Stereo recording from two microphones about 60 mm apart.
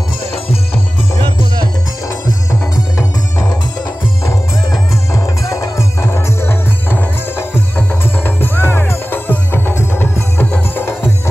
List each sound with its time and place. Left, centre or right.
3.0 s music: left
5.1 s music: left
10.4 s music: left